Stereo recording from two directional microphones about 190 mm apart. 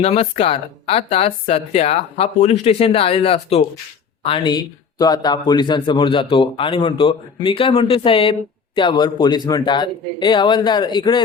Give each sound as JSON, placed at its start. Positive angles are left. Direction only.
{"t": 0.0, "sound": "a man's voice", "side_deg": 30}